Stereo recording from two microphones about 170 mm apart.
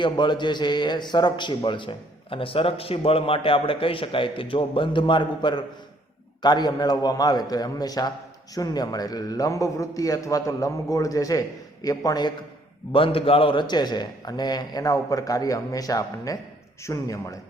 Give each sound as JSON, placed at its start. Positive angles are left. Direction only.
{"t": 0.0, "sound": "a man's voice", "side_deg": 25}